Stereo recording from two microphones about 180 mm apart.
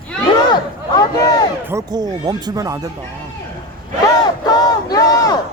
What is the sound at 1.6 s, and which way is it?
Speech, 20° right (ahead or behind).